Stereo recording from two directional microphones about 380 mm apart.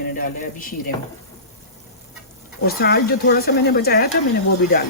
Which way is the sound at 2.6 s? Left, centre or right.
Left.